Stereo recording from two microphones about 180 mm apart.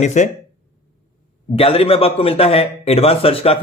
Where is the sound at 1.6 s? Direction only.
35° left (ahead or behind).